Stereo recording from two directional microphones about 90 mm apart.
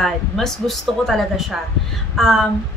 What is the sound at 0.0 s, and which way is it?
A woman's voice, 5° left (ahead or behind).